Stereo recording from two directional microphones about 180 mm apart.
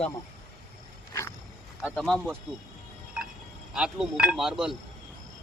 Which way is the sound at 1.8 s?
Centre (ahead or behind).